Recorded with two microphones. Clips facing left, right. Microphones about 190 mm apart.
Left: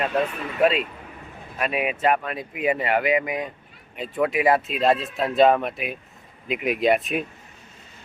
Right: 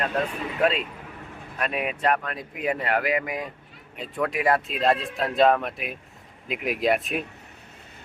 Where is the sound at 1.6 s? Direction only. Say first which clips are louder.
Left 3 dB; 5° left (ahead or behind).